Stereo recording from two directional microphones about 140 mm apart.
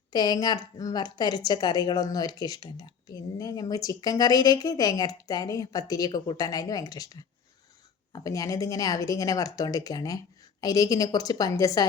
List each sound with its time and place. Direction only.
0.1 s a woman's voice: 30° left (ahead or behind)